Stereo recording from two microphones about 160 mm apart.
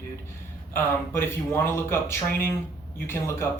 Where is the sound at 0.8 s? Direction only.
15° left (ahead or behind).